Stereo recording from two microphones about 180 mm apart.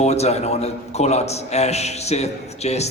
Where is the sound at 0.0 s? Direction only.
35° left (ahead or behind).